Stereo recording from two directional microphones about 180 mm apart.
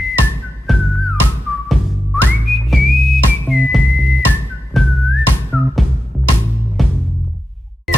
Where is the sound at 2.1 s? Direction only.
Centre (ahead or behind).